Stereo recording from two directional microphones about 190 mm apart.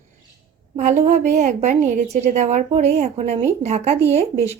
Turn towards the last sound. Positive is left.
turn(degrees=-35)  # may be behind; listen again after turning